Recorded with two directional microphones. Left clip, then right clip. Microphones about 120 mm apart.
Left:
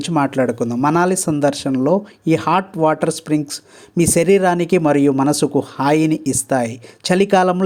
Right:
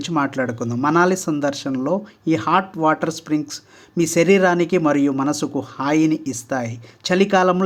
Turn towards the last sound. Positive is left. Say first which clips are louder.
# left 2 dB
turn(degrees=35)  # may be behind; listen again after turning